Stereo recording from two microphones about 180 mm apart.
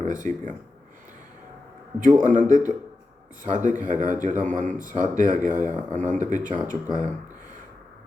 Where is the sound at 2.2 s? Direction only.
45° right (ahead or behind).